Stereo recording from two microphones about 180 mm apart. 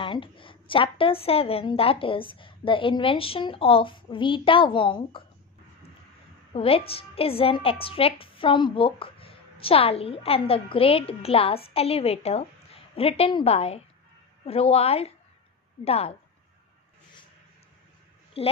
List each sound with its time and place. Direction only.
0.0 s a woman's voice: 30° left (ahead or behind)
6.5 s a woman's voice: 30° left (ahead or behind)
18.4 s a woman's voice: 35° left (ahead or behind)